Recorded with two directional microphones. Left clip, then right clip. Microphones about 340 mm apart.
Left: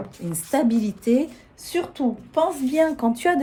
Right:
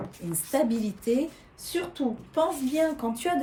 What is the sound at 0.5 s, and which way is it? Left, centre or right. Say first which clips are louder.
A woman's voice: left 4 dB; centre.